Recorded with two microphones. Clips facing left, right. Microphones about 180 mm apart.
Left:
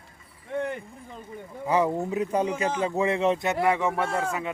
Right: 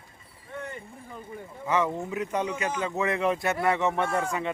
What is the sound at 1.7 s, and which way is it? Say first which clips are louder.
Speech: left 3 dB; 35° left (ahead or behind).